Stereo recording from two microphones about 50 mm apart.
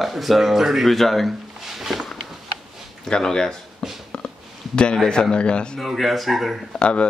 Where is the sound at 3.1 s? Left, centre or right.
Centre.